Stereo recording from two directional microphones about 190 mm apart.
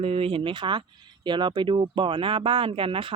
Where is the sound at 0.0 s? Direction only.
30° right (ahead or behind).